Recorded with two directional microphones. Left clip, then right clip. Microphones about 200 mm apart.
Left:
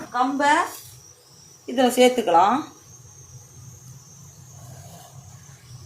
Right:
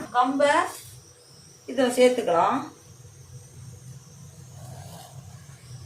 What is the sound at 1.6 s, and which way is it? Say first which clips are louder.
Speech: left 2 dB; 50° left (ahead or behind).